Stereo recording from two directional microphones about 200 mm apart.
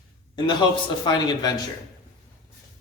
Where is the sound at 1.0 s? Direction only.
20° left (ahead or behind).